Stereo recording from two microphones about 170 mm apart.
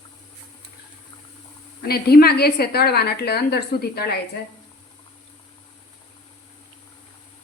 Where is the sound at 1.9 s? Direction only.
65° left (ahead or behind).